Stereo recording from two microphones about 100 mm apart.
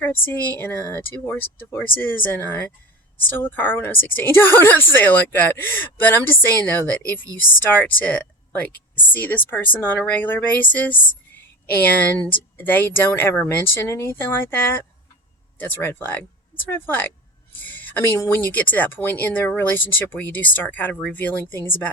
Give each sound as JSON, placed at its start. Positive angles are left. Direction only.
{"t": 0.0, "sound": "a woman's voice", "side_deg": 20}